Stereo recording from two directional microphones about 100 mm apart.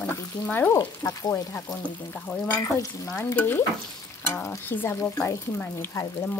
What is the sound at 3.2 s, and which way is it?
Dishes, 20° left (ahead or behind).